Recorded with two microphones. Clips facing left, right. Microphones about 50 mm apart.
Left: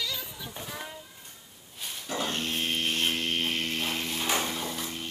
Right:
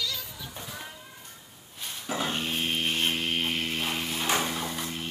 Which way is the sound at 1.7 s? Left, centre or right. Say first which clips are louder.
Even; centre.